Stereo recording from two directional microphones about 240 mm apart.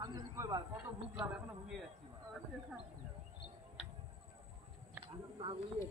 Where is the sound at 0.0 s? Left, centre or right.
Centre.